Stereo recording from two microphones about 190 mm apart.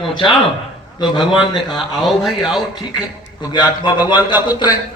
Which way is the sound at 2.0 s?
Centre (ahead or behind).